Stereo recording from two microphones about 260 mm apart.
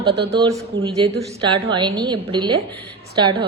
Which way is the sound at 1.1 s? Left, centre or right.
Centre.